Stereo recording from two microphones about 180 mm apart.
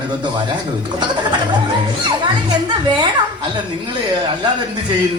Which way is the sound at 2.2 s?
25° right (ahead or behind).